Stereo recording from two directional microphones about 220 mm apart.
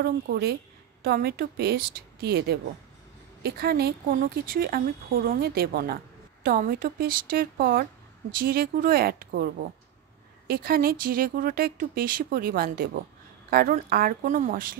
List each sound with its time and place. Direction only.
0.0 s speech: 45° right (ahead or behind)